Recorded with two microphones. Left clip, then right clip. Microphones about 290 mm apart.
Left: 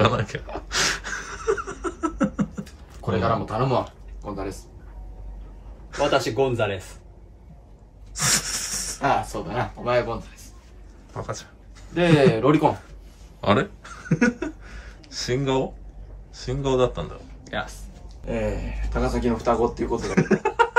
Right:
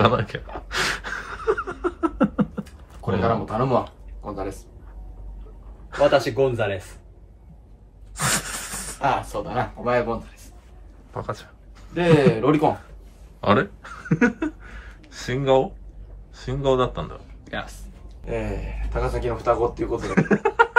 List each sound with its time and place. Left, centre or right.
0.0 s a sound: centre
4.2 s speech: centre
5.9 s speech: centre
8.1 s a sound: centre
9.3 s speech: centre
11.1 s speech: centre
13.4 s a sound: centre
16.3 s speech: centre
18.9 s speech: right
20.0 s speech: centre